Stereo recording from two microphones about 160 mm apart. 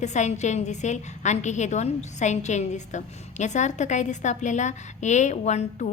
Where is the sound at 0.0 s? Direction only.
45° left (ahead or behind).